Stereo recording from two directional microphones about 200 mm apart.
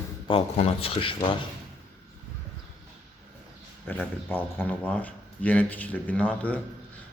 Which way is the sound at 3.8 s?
10° left (ahead or behind).